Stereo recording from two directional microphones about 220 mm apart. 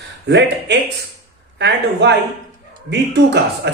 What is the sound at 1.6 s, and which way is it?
Speech, 50° right (ahead or behind).